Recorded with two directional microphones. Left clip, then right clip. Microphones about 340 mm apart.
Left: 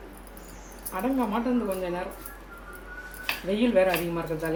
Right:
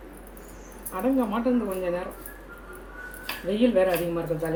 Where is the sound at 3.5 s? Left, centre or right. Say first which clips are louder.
Right 1 dB; centre.